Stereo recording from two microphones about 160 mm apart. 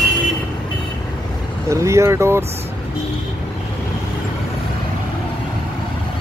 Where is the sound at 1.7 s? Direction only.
20° right (ahead or behind).